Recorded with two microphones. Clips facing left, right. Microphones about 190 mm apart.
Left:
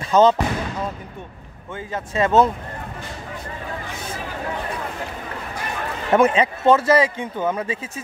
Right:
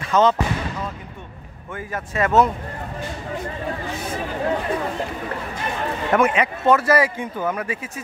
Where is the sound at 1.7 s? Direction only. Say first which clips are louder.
Left 1 dB; 25° left (ahead or behind).